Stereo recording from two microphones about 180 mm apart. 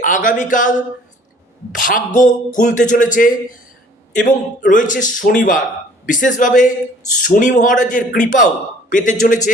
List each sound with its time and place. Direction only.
0.0 s a man's voice: 45° left (ahead or behind)